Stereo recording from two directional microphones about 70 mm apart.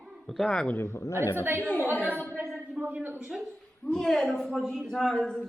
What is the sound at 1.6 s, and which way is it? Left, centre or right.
Speech, left.